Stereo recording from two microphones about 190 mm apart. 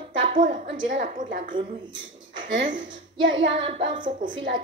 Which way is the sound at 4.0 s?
45° right (ahead or behind).